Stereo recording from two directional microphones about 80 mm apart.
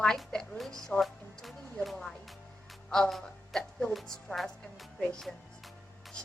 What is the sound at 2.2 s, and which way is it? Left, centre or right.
Music, centre.